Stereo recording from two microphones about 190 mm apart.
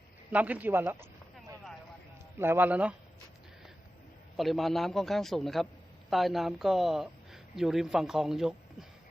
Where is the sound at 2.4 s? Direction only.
10° right (ahead or behind).